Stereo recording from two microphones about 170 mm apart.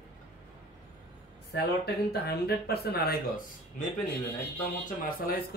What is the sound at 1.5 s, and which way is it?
A man's voice, 70° left (ahead or behind).